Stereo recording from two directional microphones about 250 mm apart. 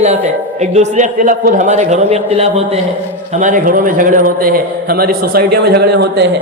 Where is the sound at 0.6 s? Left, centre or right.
Right.